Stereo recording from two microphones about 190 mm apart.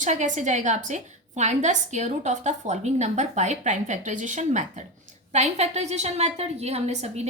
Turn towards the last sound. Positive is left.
turn(degrees=-35)  # may be behind; listen again after turning